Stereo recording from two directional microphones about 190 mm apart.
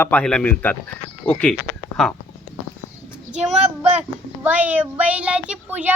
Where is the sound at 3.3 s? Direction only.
35° right (ahead or behind).